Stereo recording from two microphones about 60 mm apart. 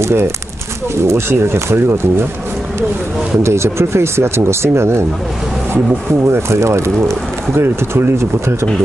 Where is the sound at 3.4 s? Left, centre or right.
Right.